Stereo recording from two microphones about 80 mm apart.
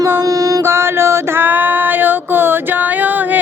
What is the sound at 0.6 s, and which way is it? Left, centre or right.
Female singing, right.